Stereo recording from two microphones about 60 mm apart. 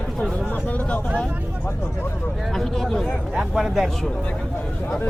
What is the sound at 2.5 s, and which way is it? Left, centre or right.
Speech, centre.